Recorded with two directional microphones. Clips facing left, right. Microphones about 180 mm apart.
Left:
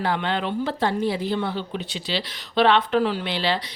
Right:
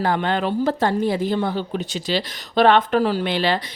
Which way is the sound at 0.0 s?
45° right (ahead or behind).